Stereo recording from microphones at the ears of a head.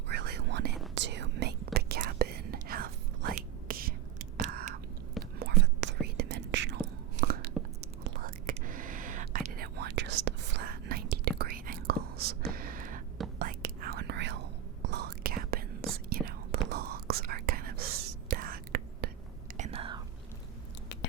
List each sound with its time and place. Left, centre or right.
0.1 s whispering: right